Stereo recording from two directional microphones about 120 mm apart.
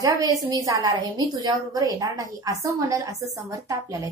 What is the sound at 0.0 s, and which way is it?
A woman's voice, 30° right (ahead or behind).